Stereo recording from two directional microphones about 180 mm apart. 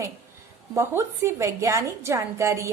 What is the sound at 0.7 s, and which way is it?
A woman's voice, 15° right (ahead or behind).